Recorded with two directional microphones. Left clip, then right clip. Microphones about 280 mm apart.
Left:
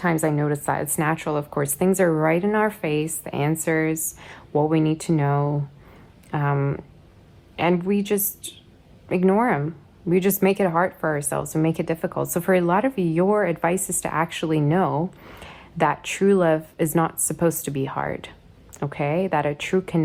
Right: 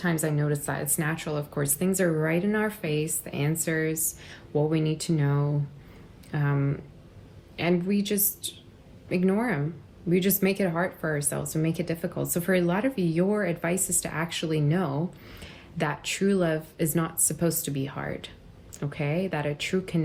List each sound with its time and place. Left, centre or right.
0.0 s speech: left